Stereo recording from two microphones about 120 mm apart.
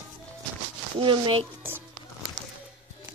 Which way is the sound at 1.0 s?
45° right (ahead or behind).